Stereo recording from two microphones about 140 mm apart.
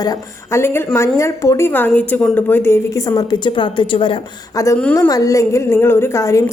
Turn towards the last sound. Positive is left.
turn(degrees=20)  # may be behind; listen again after turning